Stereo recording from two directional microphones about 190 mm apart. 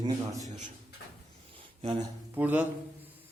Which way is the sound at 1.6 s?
30° right (ahead or behind).